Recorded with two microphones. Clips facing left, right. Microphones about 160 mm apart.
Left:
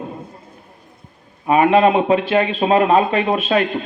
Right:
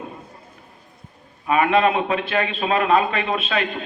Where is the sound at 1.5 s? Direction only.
30° left (ahead or behind).